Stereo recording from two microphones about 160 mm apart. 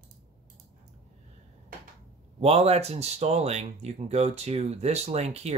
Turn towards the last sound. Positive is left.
turn(degrees=-40)  # may be behind; listen again after turning